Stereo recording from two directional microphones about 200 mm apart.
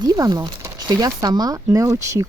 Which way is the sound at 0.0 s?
20° right (ahead or behind).